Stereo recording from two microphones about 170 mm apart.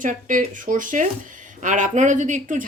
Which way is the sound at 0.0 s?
50° right (ahead or behind).